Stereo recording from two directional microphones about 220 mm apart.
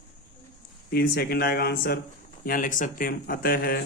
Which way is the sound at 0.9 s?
45° left (ahead or behind).